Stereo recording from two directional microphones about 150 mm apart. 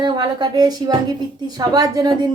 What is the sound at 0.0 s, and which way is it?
Speech, 30° right (ahead or behind).